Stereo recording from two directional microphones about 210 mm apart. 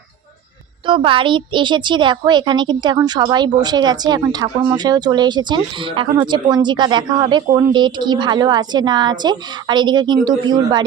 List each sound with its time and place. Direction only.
0.9 s a woman's voice: 25° right (ahead or behind)